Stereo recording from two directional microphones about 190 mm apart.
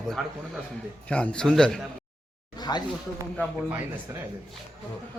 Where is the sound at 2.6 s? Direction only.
20° left (ahead or behind).